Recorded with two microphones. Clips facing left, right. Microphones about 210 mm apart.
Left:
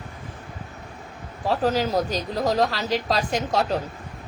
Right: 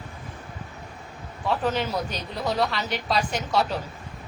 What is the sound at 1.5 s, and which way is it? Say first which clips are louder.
A woman's voice: left 3 dB; 35° left (ahead or behind).